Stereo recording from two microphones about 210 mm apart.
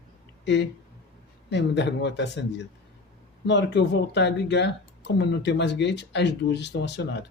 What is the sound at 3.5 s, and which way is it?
Speech, 55° left (ahead or behind).